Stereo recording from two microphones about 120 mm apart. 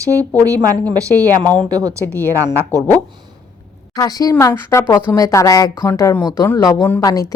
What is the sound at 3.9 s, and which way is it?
A woman's voice, 30° left (ahead or behind).